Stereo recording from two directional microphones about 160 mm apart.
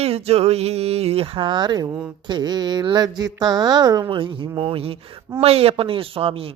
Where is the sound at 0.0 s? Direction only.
40° right (ahead or behind).